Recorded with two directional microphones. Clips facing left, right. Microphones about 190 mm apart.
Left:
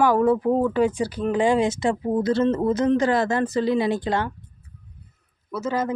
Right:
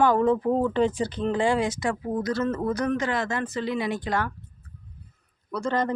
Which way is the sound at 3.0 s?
35° left (ahead or behind).